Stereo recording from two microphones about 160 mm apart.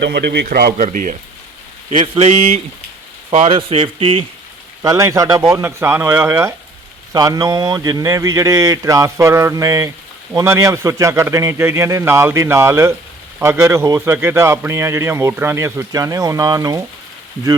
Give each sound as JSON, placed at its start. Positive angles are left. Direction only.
{"t": 0.0, "sound": "a man's voice", "side_deg": -90}
{"t": 1.9, "sound": "speech", "side_deg": -40}
{"t": 4.8, "sound": "speech", "side_deg": -20}